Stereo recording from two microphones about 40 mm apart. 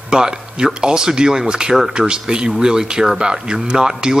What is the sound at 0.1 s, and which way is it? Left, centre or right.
Speech, centre.